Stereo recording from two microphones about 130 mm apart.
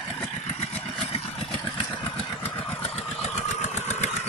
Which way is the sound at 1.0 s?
50° left (ahead or behind).